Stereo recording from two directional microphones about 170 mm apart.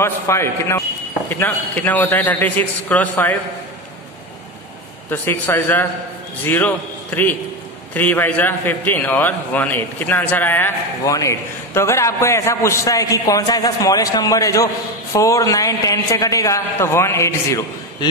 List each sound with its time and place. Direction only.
0.0 s a man's voice: 15° left (ahead or behind)
5.1 s a man's voice: 15° left (ahead or behind)